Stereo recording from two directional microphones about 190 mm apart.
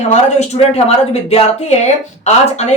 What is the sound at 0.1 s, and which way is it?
Speech, 35° left (ahead or behind).